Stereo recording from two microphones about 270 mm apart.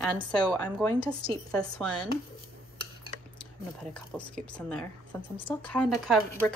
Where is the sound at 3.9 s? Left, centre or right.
Centre.